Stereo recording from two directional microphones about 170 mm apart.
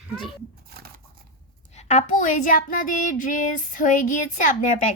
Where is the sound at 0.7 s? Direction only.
65° right (ahead or behind).